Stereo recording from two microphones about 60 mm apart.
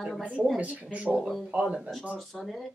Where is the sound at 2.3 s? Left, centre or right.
Centre.